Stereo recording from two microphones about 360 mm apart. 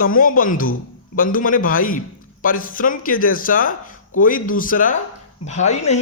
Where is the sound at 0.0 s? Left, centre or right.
Left.